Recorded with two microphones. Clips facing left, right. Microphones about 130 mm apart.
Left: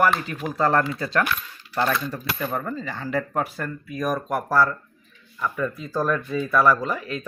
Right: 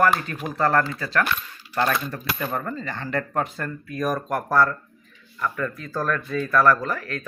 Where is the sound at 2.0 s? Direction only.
10° left (ahead or behind).